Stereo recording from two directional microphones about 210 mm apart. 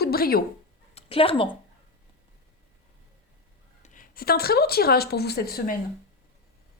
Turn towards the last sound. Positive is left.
turn(degrees=45)  # may be behind; listen again after turning